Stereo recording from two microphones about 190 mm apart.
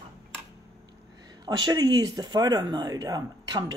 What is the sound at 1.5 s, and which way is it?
Speech, 20° right (ahead or behind).